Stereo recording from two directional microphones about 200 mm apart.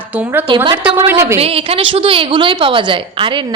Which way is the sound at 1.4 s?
30° right (ahead or behind).